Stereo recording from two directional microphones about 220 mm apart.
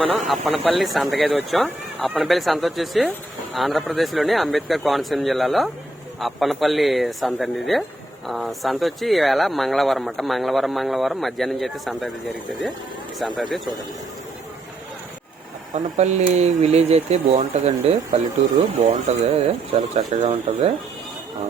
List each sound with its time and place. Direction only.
0.4 s speech: centre (ahead or behind)
13.1 s speech: centre (ahead or behind)
15.7 s speech: 30° right (ahead or behind)